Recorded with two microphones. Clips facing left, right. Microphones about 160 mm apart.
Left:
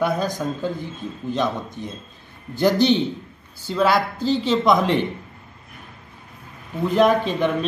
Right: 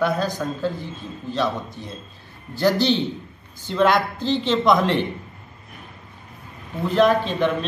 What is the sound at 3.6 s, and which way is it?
Speech, 5° left (ahead or behind).